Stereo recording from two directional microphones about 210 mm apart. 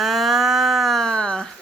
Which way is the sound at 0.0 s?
Centre (ahead or behind).